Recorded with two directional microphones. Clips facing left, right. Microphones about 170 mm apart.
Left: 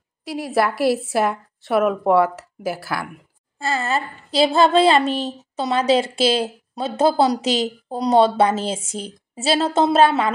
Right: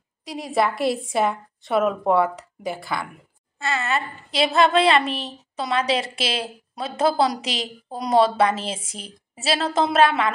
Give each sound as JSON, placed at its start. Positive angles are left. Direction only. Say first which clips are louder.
{"t": 0.2, "sound": "a woman's voice", "louder": "left 2 dB", "side_deg": 5}
{"t": 3.5, "sound": "a woman's voice", "louder": "left 2 dB", "side_deg": 30}